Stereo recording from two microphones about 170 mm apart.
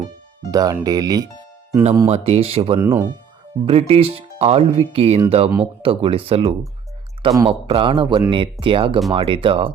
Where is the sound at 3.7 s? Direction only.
35° right (ahead or behind).